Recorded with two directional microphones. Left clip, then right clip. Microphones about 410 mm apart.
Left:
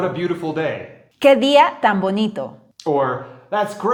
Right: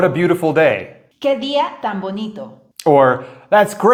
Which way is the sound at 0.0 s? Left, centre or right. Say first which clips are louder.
Right 7 dB; right.